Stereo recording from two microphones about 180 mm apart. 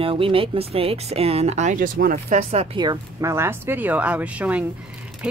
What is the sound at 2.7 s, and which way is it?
Speech, 20° right (ahead or behind).